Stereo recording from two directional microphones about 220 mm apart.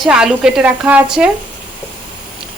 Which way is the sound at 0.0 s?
5° right (ahead or behind).